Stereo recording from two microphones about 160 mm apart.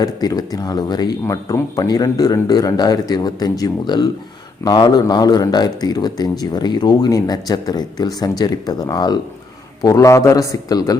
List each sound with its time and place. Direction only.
0.0 s speech: 25° left (ahead or behind)